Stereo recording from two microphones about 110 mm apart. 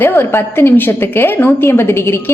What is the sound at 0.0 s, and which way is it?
A woman's voice, 20° left (ahead or behind).